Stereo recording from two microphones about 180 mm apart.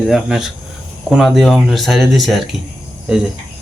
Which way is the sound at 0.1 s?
5° right (ahead or behind).